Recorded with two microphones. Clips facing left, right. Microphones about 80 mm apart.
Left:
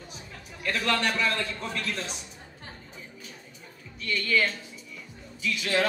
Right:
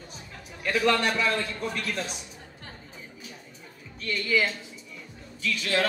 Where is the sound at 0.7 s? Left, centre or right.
Centre.